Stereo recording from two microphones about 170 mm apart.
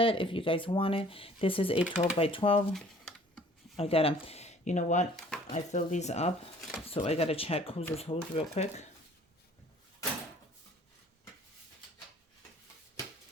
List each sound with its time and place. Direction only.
0.0 s speech: 30° left (ahead or behind)
2.7 s typing: centre (ahead or behind)
3.8 s speech: 35° left (ahead or behind)
6.6 s a sound: 5° right (ahead or behind)
6.9 s speech: 35° left (ahead or behind)